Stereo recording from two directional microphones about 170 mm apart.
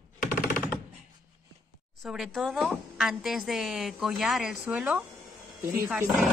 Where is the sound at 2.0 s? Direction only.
Centre (ahead or behind).